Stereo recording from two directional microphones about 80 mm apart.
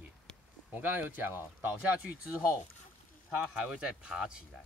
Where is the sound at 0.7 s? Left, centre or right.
Right.